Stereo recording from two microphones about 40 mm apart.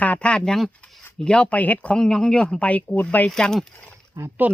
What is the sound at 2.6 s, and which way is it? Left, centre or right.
Speech, left.